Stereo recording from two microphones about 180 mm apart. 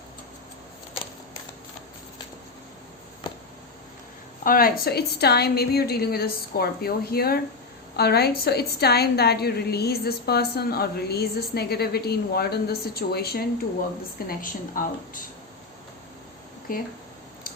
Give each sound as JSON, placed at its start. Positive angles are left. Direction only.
{"t": 4.4, "sound": "a woman's voice", "side_deg": 55}
{"t": 14.3, "sound": "speech", "side_deg": 50}
{"t": 16.7, "sound": "speech", "side_deg": 50}